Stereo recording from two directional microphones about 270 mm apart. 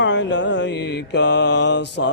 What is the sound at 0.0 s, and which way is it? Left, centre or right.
Mantra, left.